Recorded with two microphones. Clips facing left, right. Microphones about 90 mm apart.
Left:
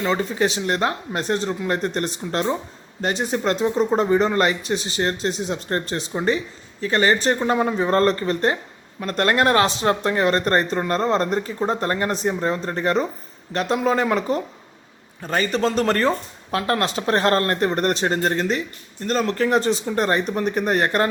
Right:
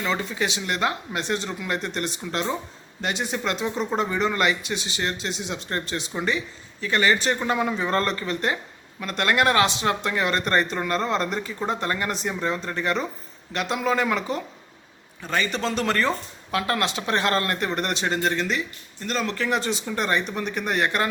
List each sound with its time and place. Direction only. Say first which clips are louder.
0.0 s speech: left 5 dB; 40° left (ahead or behind)